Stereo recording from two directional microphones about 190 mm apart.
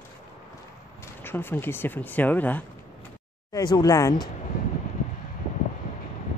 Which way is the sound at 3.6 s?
20° left (ahead or behind).